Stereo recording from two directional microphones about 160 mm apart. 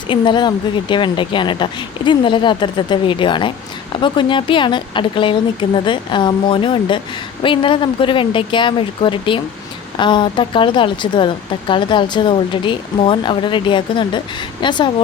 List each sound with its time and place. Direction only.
0.1 s speech: 30° left (ahead or behind)